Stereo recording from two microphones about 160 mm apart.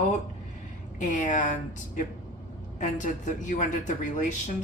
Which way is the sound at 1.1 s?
50° left (ahead or behind).